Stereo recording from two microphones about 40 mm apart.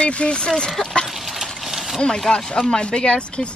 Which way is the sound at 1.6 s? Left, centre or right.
Centre.